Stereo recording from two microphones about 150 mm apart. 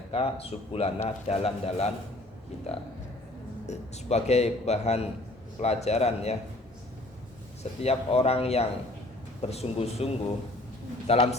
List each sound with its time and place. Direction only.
0.1 s speech: 40° left (ahead or behind)
3.7 s a man's voice: 45° left (ahead or behind)
7.8 s a man's voice: 40° left (ahead or behind)